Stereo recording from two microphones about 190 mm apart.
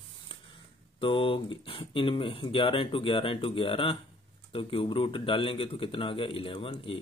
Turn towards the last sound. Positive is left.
turn(degrees=30)  # may be behind; listen again after turning